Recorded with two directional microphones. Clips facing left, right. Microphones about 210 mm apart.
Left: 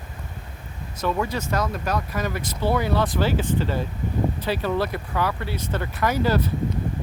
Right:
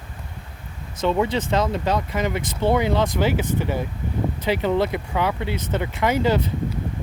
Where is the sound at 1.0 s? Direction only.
25° right (ahead or behind).